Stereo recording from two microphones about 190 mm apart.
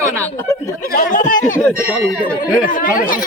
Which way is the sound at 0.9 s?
45° left (ahead or behind).